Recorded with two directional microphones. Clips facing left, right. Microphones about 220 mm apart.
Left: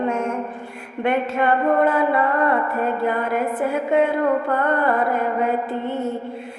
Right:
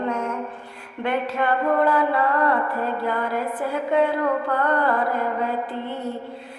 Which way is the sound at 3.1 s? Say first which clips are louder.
Left 3 dB; 20° left (ahead or behind).